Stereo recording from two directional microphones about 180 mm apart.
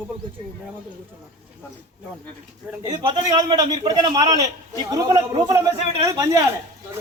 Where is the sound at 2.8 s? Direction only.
25° right (ahead or behind).